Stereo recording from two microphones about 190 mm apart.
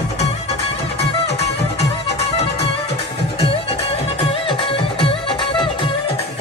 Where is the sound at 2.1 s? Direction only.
30° left (ahead or behind).